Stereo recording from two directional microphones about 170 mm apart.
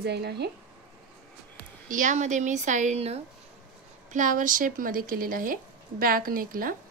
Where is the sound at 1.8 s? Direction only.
50° right (ahead or behind).